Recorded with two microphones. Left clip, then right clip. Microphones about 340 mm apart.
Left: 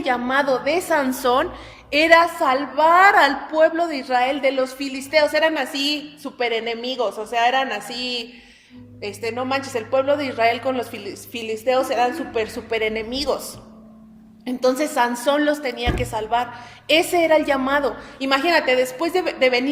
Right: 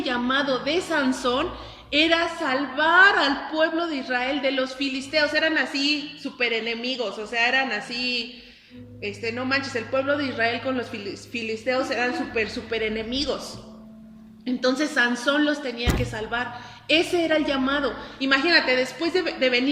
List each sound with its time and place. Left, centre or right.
0.0 s a woman's voice: centre
14.4 s a woman's voice: left